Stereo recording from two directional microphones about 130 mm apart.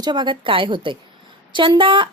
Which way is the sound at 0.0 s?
35° right (ahead or behind).